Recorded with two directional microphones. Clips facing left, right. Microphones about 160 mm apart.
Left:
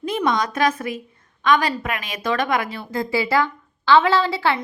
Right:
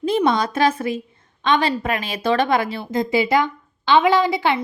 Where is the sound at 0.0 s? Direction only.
30° right (ahead or behind).